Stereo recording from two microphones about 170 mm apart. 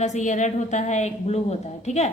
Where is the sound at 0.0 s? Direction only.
45° left (ahead or behind).